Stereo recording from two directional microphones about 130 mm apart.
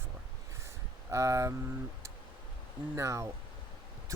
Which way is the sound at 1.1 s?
25° right (ahead or behind).